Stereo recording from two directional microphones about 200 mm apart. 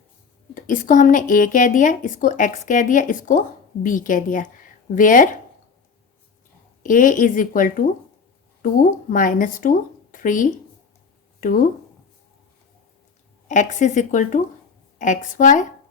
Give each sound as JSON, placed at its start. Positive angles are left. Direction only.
{"t": 0.5, "sound": "speech", "side_deg": 40}
{"t": 6.8, "sound": "speech", "side_deg": 40}
{"t": 13.5, "sound": "speech", "side_deg": 40}